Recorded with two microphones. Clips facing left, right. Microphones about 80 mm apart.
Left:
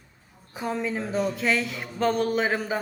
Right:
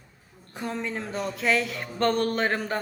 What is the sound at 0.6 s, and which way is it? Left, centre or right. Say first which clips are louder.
Speech: left 3 dB; centre.